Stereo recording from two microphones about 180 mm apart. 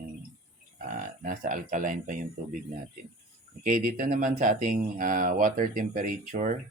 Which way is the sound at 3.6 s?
50° right (ahead or behind).